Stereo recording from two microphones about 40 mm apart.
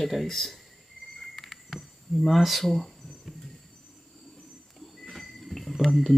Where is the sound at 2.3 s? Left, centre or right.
Centre.